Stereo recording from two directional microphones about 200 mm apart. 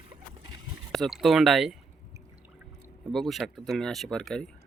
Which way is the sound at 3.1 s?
Centre (ahead or behind).